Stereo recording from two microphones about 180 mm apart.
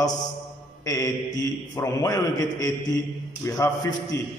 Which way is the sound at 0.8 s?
20° left (ahead or behind).